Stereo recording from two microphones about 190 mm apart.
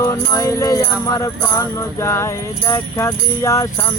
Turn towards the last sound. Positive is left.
turn(degrees=15)  # may be behind; listen again after turning